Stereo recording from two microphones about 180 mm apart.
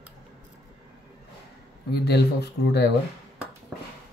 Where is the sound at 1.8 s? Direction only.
65° left (ahead or behind).